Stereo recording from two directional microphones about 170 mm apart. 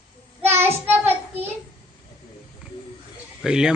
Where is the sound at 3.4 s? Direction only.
5° right (ahead or behind).